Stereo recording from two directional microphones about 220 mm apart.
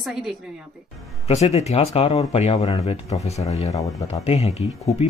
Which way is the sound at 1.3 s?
30° left (ahead or behind).